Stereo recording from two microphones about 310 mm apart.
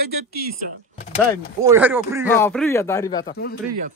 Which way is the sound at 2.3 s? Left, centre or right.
Centre.